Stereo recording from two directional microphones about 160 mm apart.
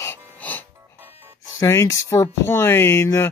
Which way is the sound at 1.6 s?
20° left (ahead or behind).